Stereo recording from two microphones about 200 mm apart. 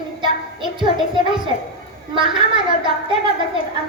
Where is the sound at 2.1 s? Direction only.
25° right (ahead or behind).